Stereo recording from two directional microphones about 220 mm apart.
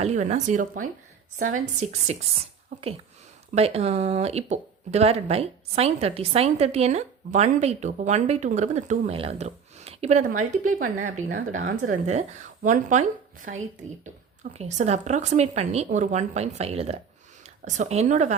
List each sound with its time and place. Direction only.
0.0 s a woman's voice: 30° right (ahead or behind)
14.5 s a woman's voice: 30° right (ahead or behind)